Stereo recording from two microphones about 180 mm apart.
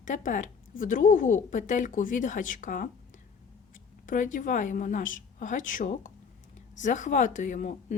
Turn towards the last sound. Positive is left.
turn(degrees=45)  # may be behind; listen again after turning